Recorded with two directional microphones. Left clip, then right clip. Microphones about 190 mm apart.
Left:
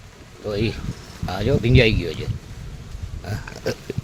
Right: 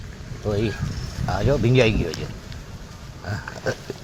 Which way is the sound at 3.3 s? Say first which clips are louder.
Even; 35° left (ahead or behind).